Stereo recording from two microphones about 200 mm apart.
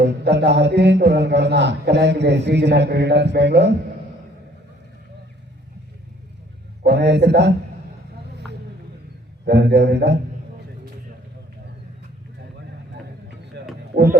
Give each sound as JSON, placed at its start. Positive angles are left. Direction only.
{"t": 0.0, "sound": "a man's voice", "side_deg": -55}
{"t": 6.8, "sound": "a man's voice", "side_deg": -55}
{"t": 9.4, "sound": "a man's voice", "side_deg": -55}
{"t": 13.5, "sound": "a sound", "side_deg": -60}
{"t": 13.9, "sound": "speech", "side_deg": -50}